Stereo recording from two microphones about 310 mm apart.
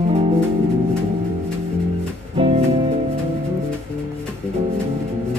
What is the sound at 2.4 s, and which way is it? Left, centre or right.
Music, centre.